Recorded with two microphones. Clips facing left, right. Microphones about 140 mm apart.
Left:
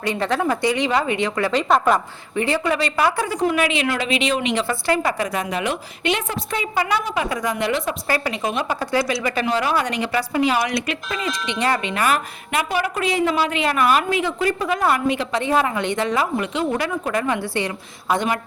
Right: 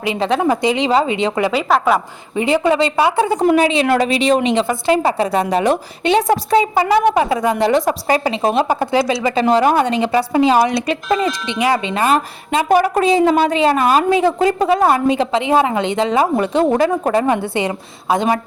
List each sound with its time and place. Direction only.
0.2 s a woman's voice: 20° right (ahead or behind)
1.6 s a woman's voice: 5° right (ahead or behind)
2.3 s a woman's voice: 20° right (ahead or behind); by 4.4 s 40° right (ahead or behind)
4.7 s a woman's voice: 25° right (ahead or behind)
7.6 s a woman's voice: 40° right (ahead or behind)
8.0 s a woman's voice: 20° right (ahead or behind)
8.4 s a woman's voice: 35° right (ahead or behind)
8.9 s a woman's voice: 25° right (ahead or behind)
9.5 s a woman's voice: 40° right (ahead or behind)
9.8 s a woman's voice: 25° right (ahead or behind)
12.6 s a woman's voice: 45° right (ahead or behind)
13.6 s a woman's voice: 30° right (ahead or behind)
16.6 s a woman's voice: 45° right (ahead or behind); by 18.3 s 20° right (ahead or behind)